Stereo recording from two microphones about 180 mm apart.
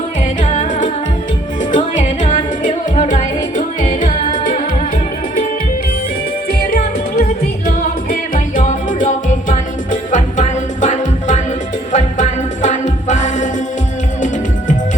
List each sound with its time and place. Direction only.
0.4 s music: 40° left (ahead or behind)
6.5 s music: 55° left (ahead or behind)